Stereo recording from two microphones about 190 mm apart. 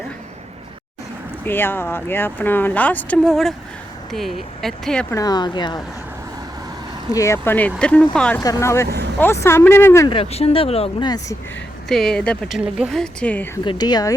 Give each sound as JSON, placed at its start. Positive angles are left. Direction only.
{"t": 1.5, "sound": "speech", "side_deg": 10}
{"t": 5.1, "sound": "speech", "side_deg": 20}
{"t": 7.1, "sound": "speech", "side_deg": 15}
{"t": 8.4, "sound": "speech", "side_deg": 20}
{"t": 10.1, "sound": "speech", "side_deg": 30}
{"t": 11.9, "sound": "speech", "side_deg": 0}
{"t": 13.7, "sound": "speech", "side_deg": 20}